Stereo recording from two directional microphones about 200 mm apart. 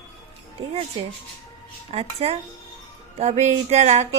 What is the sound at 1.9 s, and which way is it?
A woman's voice, 30° right (ahead or behind).